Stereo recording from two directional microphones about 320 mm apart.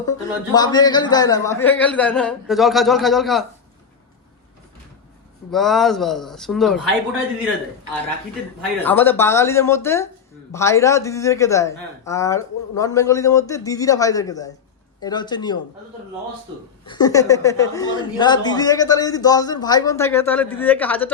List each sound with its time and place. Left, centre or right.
0.0 s a man's voice: centre
5.5 s a man's voice: centre
8.8 s speech: centre
16.8 s speech: centre